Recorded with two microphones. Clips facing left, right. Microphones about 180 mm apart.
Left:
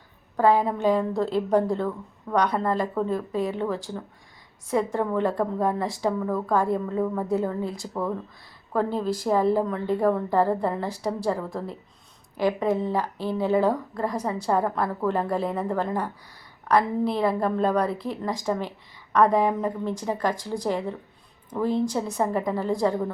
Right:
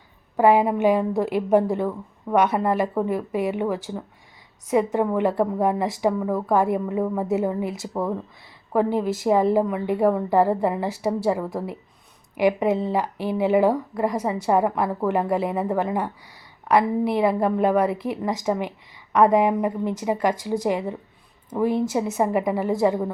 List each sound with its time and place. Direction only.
0.3 s a woman's voice: 15° right (ahead or behind)